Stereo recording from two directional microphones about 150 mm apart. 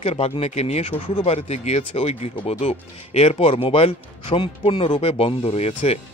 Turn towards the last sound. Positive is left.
turn(degrees=45)  # may be behind; listen again after turning